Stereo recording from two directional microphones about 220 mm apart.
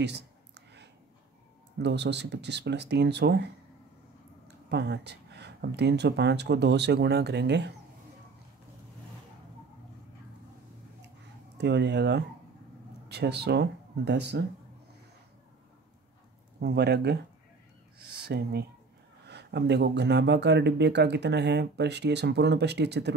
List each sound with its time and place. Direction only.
0.0 s a sound: 50° right (ahead or behind)
1.8 s speech: 50° right (ahead or behind)
4.5 s speech: 50° right (ahead or behind)
11.5 s speech: 50° right (ahead or behind)
16.6 s speech: 50° right (ahead or behind)